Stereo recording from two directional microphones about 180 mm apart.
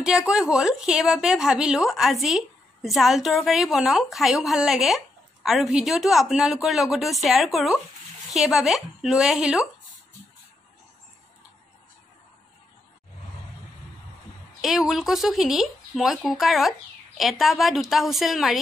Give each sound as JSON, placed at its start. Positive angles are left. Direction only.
{"t": 0.0, "sound": "a woman's voice", "side_deg": -5}
{"t": 14.6, "sound": "a woman's voice", "side_deg": 0}